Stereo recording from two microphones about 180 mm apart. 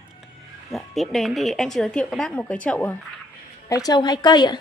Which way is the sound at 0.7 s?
Centre (ahead or behind).